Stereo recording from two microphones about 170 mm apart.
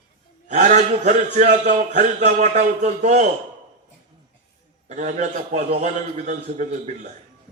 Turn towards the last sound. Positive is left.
turn(degrees=-45)  # may be behind; listen again after turning